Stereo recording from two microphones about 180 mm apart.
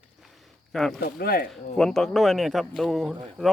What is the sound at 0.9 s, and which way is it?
Speech, 55° left (ahead or behind).